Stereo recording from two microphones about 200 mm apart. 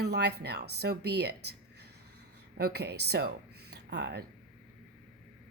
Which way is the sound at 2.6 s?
55° right (ahead or behind).